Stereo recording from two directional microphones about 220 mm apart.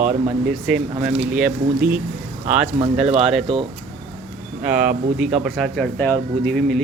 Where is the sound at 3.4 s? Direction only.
25° right (ahead or behind).